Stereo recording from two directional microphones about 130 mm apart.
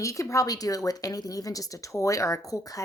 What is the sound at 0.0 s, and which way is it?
Speech, 25° left (ahead or behind).